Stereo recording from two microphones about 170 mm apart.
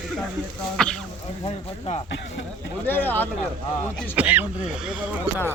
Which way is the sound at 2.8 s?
10° left (ahead or behind).